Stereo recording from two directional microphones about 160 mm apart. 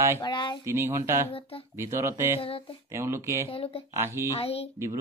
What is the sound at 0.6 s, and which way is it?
Speech, 15° right (ahead or behind).